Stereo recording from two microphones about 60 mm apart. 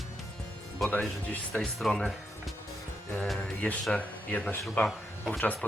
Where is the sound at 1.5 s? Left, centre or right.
Centre.